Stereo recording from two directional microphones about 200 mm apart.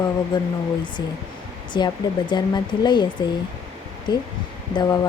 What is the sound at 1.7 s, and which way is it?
Speech, 20° left (ahead or behind).